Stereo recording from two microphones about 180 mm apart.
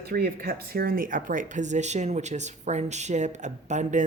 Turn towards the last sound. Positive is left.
turn(degrees=-40)  # may be behind; listen again after turning